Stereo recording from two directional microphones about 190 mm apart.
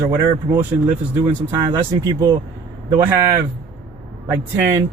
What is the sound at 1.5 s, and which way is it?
Speech, 20° right (ahead or behind).